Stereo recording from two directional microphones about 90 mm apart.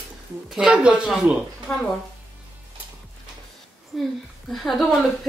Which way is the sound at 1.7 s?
15° left (ahead or behind).